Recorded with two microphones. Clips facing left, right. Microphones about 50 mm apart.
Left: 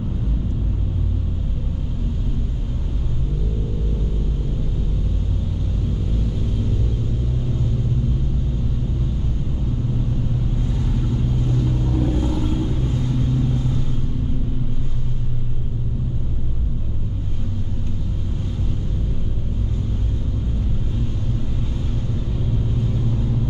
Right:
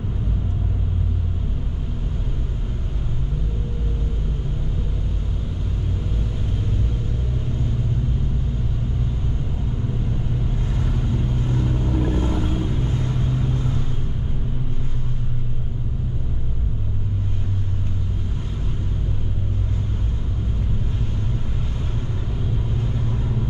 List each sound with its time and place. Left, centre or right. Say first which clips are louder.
10.7 s vehicle: even; right